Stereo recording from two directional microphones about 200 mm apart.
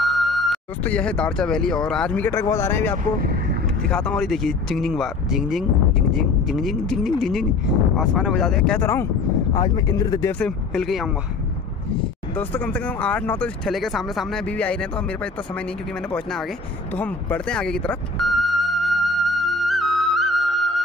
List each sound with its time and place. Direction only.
0.0 s speech: centre (ahead or behind)
3.2 s vehicle: 50° right (ahead or behind)
3.8 s speech: 5° left (ahead or behind)
10.4 s speech: 5° left (ahead or behind)
12.4 s speech: 10° left (ahead or behind)
16.1 s speech: centre (ahead or behind)
16.9 s vehicle: 10° left (ahead or behind)